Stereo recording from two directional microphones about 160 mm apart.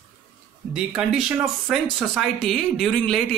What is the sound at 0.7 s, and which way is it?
Speech, 5° right (ahead or behind).